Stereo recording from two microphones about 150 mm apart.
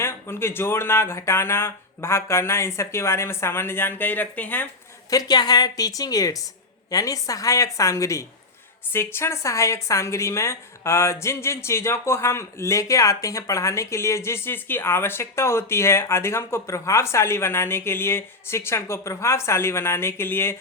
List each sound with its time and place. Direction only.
0.0 s a woman's voice: 15° left (ahead or behind)
5.1 s a woman's voice: 25° left (ahead or behind)